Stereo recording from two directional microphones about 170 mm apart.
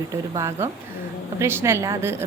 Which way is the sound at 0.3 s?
15° right (ahead or behind).